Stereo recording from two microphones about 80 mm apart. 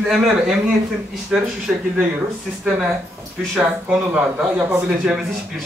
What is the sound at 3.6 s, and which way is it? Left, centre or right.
A man's voice, centre.